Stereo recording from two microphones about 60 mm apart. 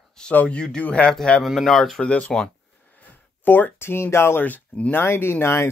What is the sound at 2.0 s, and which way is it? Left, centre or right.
Speech, centre.